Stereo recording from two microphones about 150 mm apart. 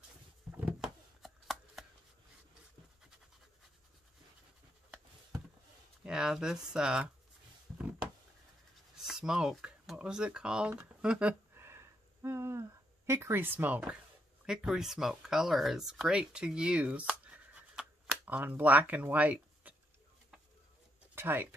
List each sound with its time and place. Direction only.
0.7 s chopping: 5° right (ahead or behind)
6.0 s speech: 5° right (ahead or behind)
7.7 s a sound: 10° right (ahead or behind)
8.9 s a sound: 5° right (ahead or behind)
14.4 s speech: 5° right (ahead or behind)
21.1 s speech: 15° right (ahead or behind)